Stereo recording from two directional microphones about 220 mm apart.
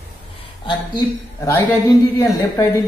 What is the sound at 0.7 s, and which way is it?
A woman's voice, 15° left (ahead or behind).